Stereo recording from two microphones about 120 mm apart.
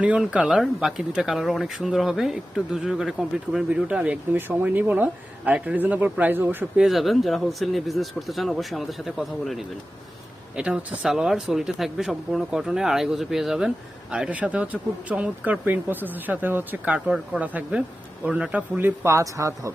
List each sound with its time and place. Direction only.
0.0 s speech: 10° right (ahead or behind)
6.8 s speech: centre (ahead or behind)
18.8 s speech: 20° right (ahead or behind)